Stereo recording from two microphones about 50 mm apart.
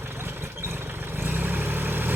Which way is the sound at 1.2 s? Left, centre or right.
Right.